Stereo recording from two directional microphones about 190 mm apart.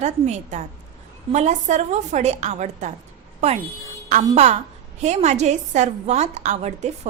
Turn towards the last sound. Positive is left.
turn(degrees=-35)  # may be behind; listen again after turning